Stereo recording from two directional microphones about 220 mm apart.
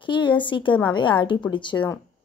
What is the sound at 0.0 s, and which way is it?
A woman's voice, 20° left (ahead or behind).